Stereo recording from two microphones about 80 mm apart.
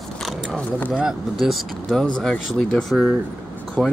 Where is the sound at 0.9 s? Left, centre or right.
Centre.